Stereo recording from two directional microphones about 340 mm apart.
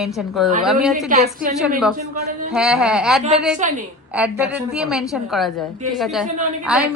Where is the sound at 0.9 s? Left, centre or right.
Right.